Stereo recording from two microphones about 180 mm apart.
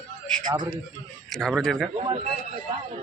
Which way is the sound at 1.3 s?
Centre (ahead or behind).